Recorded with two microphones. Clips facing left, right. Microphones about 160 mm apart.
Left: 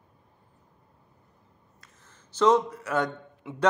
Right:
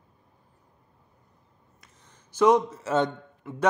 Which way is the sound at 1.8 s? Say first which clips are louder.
Even; 15° right (ahead or behind).